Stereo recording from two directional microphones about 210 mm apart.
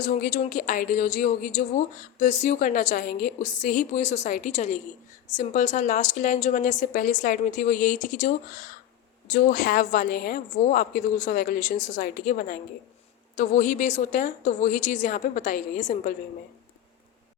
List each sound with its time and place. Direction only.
0.0 s speech: 35° left (ahead or behind)